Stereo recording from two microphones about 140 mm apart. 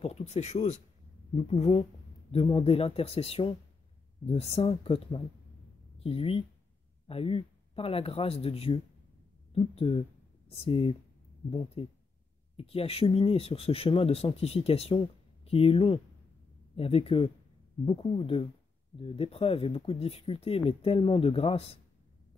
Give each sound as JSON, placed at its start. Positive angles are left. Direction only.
{"t": 0.0, "sound": "speech", "side_deg": 50}